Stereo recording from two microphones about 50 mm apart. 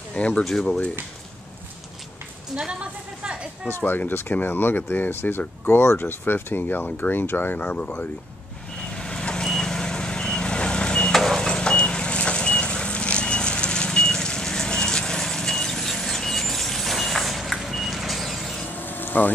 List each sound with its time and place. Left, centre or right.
0.1 s speech: left
0.4 s speech: centre
2.5 s speech: centre
3.6 s speech: left
8.8 s vehicle: centre
11.1 s vehicle: centre
18.7 s a sound: left